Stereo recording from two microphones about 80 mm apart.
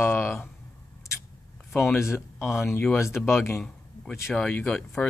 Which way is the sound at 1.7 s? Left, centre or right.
Centre.